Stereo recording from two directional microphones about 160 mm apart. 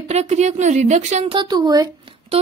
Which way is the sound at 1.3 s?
25° right (ahead or behind).